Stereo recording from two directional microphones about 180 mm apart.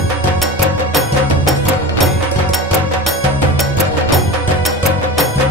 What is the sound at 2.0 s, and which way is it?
Music, centre (ahead or behind).